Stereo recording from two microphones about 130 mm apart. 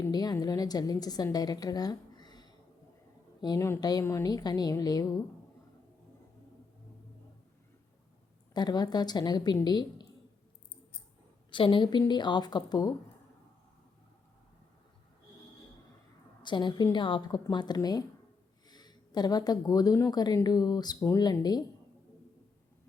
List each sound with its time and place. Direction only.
0.0 s a woman's voice: 30° left (ahead or behind)
8.5 s a woman's voice: 30° left (ahead or behind)
11.5 s a woman's voice: 40° left (ahead or behind)
16.4 s a woman's voice: 35° left (ahead or behind)